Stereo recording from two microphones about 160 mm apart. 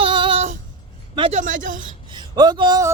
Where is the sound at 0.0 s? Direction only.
30° right (ahead or behind).